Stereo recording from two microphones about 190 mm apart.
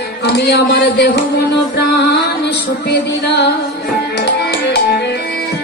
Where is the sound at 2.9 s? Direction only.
60° left (ahead or behind).